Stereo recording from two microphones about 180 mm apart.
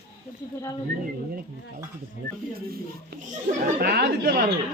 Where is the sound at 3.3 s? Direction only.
55° right (ahead or behind).